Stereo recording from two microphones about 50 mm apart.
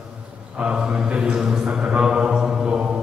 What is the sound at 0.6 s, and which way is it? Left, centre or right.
Mantra, centre.